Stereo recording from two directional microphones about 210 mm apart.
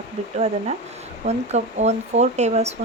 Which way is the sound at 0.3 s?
30° right (ahead or behind).